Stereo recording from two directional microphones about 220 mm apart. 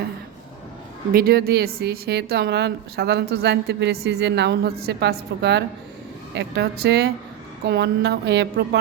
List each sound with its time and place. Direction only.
1.1 s a woman's voice: 45° right (ahead or behind)